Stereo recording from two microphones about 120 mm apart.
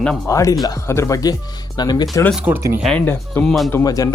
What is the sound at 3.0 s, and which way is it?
Speech, 15° left (ahead or behind).